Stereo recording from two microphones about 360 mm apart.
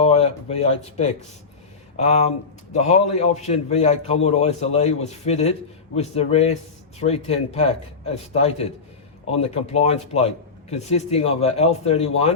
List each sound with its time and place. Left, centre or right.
0.0 s a man's voice: centre